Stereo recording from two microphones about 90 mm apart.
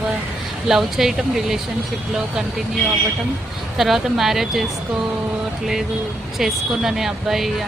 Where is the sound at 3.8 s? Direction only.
5° right (ahead or behind).